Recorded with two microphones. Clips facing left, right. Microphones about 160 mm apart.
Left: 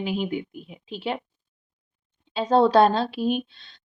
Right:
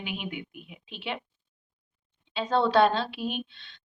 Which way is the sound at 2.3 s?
40° left (ahead or behind).